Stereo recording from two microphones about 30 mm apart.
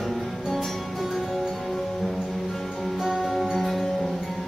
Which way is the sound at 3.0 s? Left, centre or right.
Centre.